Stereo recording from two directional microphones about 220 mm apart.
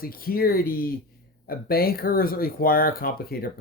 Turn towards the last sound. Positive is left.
turn(degrees=40)  # may be behind; listen again after turning